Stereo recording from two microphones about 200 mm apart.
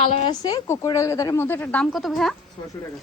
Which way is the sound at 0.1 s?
30° left (ahead or behind).